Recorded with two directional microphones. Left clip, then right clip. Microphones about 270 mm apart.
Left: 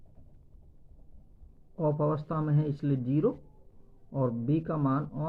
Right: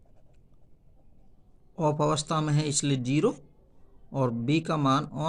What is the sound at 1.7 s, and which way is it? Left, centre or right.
A man's voice, right.